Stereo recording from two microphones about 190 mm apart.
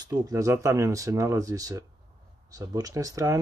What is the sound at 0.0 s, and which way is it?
Speech, 20° right (ahead or behind).